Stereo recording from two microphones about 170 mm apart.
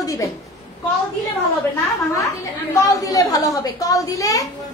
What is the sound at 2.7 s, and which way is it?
A woman's voice, 20° left (ahead or behind).